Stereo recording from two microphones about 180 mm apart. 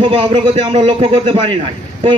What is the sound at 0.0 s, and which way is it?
A man's voice, 30° right (ahead or behind).